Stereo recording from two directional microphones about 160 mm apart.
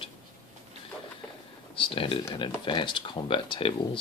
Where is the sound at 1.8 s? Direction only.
35° left (ahead or behind).